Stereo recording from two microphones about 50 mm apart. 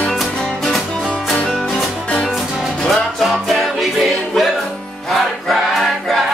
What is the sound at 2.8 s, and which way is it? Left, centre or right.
Music, centre.